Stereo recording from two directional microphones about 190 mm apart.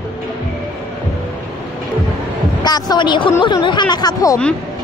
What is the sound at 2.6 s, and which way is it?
A woman's voice, 20° left (ahead or behind).